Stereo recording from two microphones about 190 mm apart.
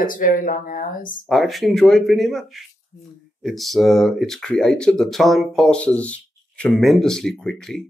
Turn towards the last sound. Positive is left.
turn(degrees=5)  # may be behind; listen again after turning